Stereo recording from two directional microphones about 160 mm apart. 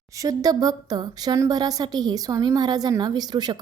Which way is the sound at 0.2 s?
20° right (ahead or behind).